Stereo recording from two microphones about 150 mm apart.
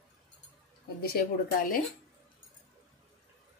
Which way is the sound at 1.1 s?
70° left (ahead or behind).